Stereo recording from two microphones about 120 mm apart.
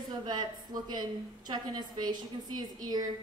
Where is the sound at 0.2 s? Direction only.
35° right (ahead or behind).